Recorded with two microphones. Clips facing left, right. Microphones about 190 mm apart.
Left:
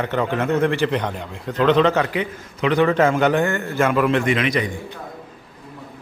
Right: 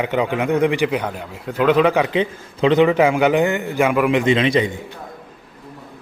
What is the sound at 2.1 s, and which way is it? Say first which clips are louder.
A man's voice: right 5 dB; 25° right (ahead or behind).